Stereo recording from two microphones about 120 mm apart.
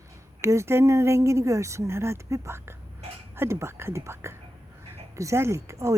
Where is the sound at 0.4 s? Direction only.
25° right (ahead or behind).